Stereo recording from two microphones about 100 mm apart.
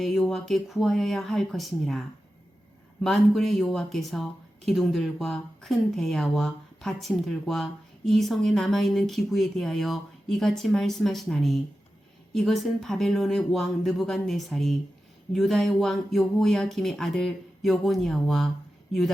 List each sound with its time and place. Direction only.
0.0 s speech: centre (ahead or behind)